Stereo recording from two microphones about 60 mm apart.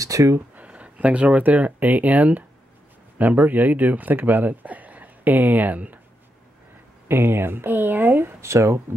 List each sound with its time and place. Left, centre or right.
0.0 s speech: right
0.6 s speech: right
7.1 s speech: right
8.4 s speech: right